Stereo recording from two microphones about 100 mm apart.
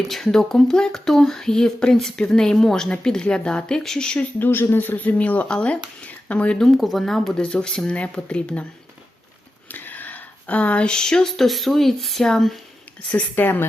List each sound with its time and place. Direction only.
0.1 s speech: 5° left (ahead or behind)
4.4 s speech: 20° left (ahead or behind)
6.7 s speech: centre (ahead or behind)
9.6 s speech: 20° left (ahead or behind)
13.1 s a woman's voice: 15° left (ahead or behind)